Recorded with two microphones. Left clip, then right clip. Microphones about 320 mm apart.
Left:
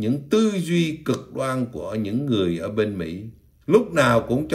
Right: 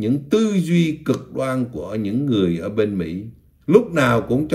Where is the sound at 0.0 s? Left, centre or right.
Centre.